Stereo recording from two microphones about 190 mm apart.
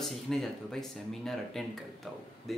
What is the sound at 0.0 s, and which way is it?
Speech, centre (ahead or behind).